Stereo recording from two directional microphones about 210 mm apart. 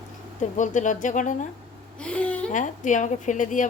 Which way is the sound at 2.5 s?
35° left (ahead or behind).